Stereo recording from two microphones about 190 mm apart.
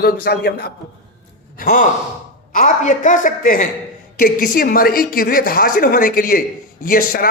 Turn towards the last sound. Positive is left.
turn(degrees=50)  # may be behind; listen again after turning